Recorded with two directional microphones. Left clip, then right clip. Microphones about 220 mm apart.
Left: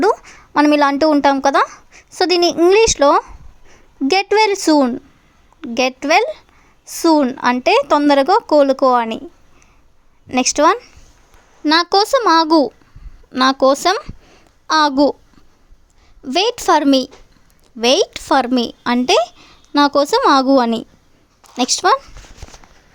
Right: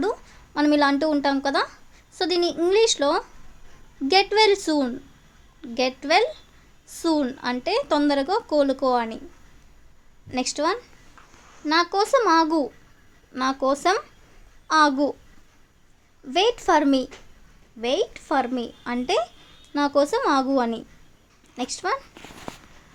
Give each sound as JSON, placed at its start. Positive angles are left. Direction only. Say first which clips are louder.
{"t": 0.0, "sound": "a woman's voice", "louder": "left 11 dB", "side_deg": 40}
{"t": 10.2, "sound": "a woman's voice", "louder": "left 11 dB", "side_deg": 40}
{"t": 16.2, "sound": "a woman's voice", "louder": "left 5 dB", "side_deg": 45}